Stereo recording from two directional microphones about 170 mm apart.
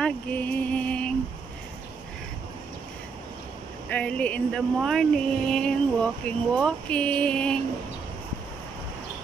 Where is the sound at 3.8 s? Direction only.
5° left (ahead or behind).